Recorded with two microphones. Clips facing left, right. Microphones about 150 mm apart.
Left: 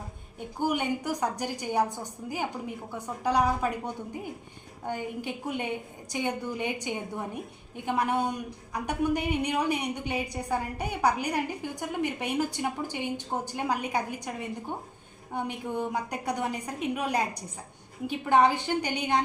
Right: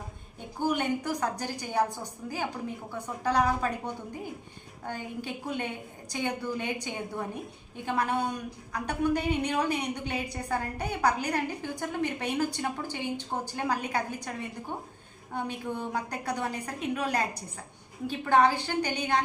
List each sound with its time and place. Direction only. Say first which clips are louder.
0.6 s a woman's voice: even; 15° left (ahead or behind)
4.9 s a woman's voice: left 3 dB; 15° left (ahead or behind)